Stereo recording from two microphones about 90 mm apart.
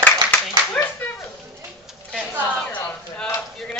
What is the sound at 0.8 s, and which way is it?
Clapping, 20° left (ahead or behind).